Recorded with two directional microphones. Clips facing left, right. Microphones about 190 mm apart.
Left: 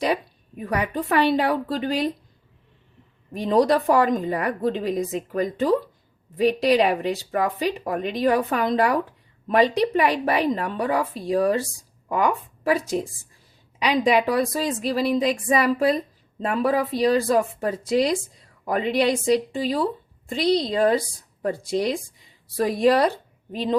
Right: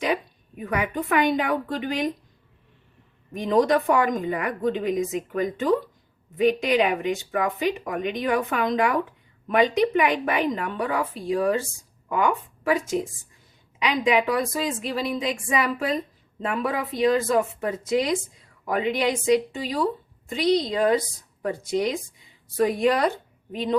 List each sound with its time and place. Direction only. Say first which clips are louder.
0.7 s a woman's voice: left 1 dB; 35° left (ahead or behind)
3.6 s a woman's voice: left 2 dB; 35° left (ahead or behind)
6.3 s a woman's voice: left 2 dB; 35° left (ahead or behind)